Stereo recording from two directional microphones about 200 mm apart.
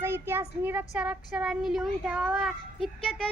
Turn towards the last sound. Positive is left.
turn(degrees=0)  # may be behind; listen again after turning